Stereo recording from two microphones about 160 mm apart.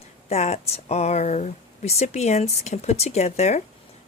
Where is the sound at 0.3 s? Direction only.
40° left (ahead or behind).